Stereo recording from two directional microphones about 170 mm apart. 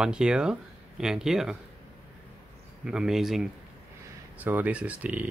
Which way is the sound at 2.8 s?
5° right (ahead or behind).